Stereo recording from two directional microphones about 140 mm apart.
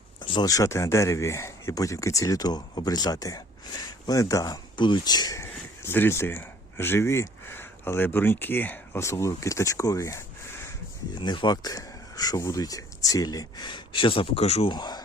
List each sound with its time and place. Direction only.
0.2 s speech: 35° left (ahead or behind)
11.2 s speech: 35° left (ahead or behind)
14.7 s speech: 30° left (ahead or behind)